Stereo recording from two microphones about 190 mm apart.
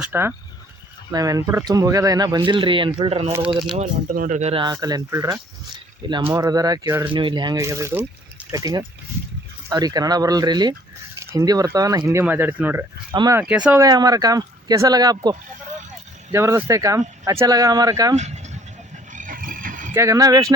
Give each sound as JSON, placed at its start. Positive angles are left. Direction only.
{"t": 0.0, "sound": "speech", "side_deg": -10}
{"t": 3.8, "sound": "speech", "side_deg": -40}
{"t": 4.6, "sound": "speech", "side_deg": -20}
{"t": 7.1, "sound": "speech", "side_deg": -25}
{"t": 13.4, "sound": "speech", "side_deg": -5}
{"t": 13.8, "sound": "speech", "side_deg": -20}
{"t": 18.2, "sound": "a sound", "side_deg": -35}
{"t": 19.1, "sound": "vehicle", "side_deg": -45}
{"t": 19.9, "sound": "speech", "side_deg": -15}